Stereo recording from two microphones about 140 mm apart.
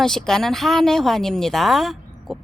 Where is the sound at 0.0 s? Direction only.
5° left (ahead or behind).